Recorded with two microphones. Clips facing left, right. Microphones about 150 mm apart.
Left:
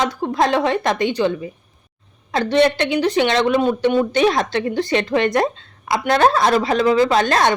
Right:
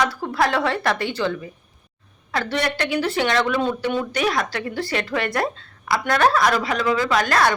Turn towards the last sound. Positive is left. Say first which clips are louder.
# left 4 dB
turn(degrees=25)  # may be behind; listen again after turning